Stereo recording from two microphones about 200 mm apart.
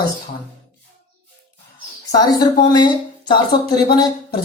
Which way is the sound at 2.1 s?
20° left (ahead or behind).